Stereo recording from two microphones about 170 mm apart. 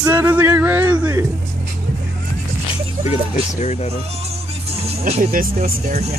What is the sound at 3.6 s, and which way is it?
Speech, 40° left (ahead or behind).